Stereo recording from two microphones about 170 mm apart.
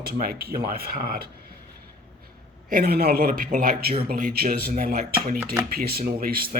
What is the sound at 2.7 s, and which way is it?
Speech, 65° right (ahead or behind).